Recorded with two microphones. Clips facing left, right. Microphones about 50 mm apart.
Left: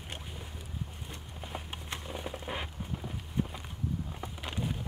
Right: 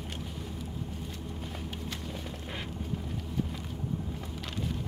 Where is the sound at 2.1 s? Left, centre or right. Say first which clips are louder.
Left 1 dB; centre.